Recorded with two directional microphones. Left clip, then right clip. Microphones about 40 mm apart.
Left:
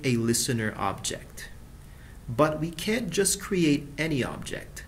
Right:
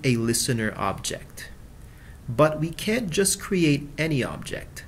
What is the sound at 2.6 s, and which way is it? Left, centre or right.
Speech, right.